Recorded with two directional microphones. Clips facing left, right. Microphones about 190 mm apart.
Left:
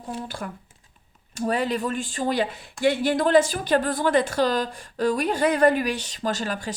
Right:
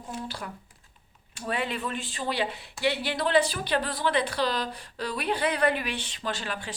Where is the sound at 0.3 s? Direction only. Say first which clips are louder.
Left 4 dB; 50° left (ahead or behind).